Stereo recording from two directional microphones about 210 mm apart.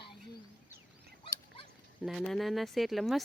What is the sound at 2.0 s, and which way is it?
A woman's voice, centre (ahead or behind).